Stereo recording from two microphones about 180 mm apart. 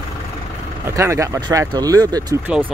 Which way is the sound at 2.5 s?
5° right (ahead or behind).